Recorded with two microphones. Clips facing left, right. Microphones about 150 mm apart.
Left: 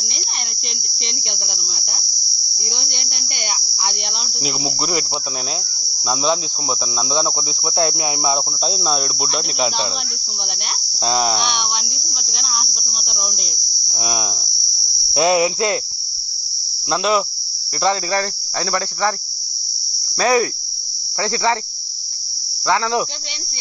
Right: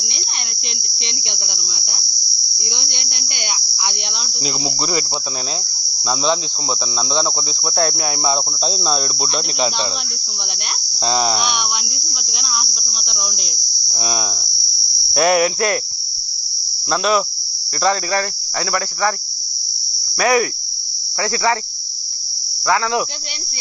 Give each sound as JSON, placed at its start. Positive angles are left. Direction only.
{"t": 1.3, "sound": "cricket", "side_deg": 0}
{"t": 3.7, "sound": "cricket", "side_deg": 40}
{"t": 4.1, "sound": "cricket", "side_deg": 5}
{"t": 7.0, "sound": "cricket", "side_deg": 5}
{"t": 7.7, "sound": "cricket", "side_deg": 20}
{"t": 8.2, "sound": "cricket", "side_deg": 5}
{"t": 11.0, "sound": "cricket", "side_deg": 5}
{"t": 15.1, "sound": "cricket", "side_deg": 20}
{"t": 16.9, "sound": "cricket", "side_deg": 20}
{"t": 20.2, "sound": "cricket", "side_deg": 25}